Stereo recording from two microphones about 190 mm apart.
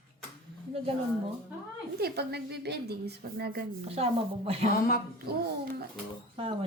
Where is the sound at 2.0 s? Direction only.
60° right (ahead or behind).